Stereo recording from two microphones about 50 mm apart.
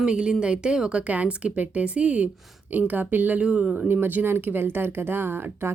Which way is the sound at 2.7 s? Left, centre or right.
Right.